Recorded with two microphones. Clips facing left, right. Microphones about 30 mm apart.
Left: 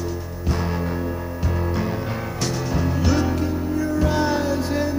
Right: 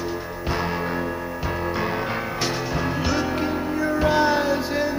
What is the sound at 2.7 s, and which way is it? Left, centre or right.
Music, centre.